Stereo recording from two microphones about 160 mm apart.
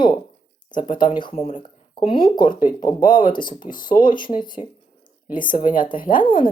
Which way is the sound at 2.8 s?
55° left (ahead or behind).